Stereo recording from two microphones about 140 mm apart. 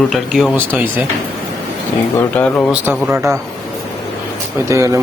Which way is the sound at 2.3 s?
10° left (ahead or behind).